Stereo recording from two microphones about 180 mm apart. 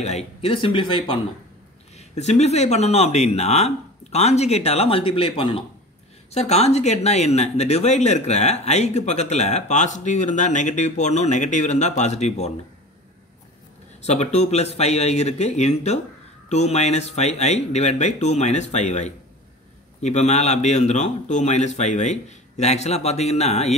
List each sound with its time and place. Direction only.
0.0 s speech: 35° left (ahead or behind)
2.0 s speech: 40° left (ahead or behind)
14.0 s speech: 40° left (ahead or behind)